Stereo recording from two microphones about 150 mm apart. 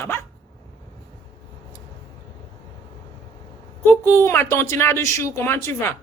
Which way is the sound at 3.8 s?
15° left (ahead or behind).